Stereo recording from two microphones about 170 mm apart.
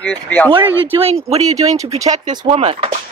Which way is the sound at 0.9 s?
35° right (ahead or behind).